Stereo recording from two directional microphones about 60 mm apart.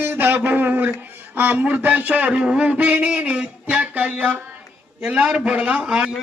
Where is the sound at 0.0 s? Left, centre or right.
Right.